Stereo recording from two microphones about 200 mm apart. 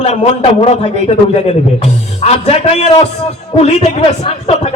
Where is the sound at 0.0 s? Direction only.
35° left (ahead or behind).